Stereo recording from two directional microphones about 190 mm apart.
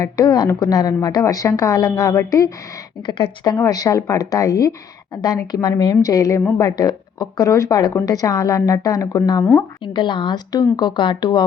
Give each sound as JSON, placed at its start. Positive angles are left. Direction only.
{"t": 0.0, "sound": "a woman's voice", "side_deg": 20}